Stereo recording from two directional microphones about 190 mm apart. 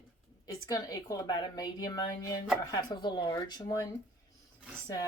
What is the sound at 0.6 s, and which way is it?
A woman's voice, 20° left (ahead or behind).